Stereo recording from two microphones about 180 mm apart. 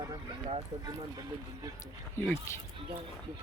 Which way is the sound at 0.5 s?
20° right (ahead or behind).